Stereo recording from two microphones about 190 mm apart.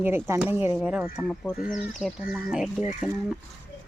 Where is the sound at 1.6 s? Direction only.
45° left (ahead or behind).